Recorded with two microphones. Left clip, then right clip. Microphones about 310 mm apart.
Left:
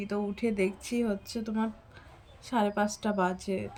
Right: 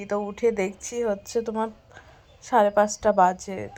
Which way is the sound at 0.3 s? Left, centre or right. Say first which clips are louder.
Right 7 dB; centre.